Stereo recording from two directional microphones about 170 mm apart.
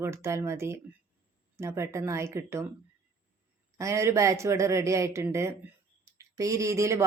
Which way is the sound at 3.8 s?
15° right (ahead or behind).